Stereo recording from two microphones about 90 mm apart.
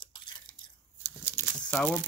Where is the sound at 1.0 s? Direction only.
20° right (ahead or behind).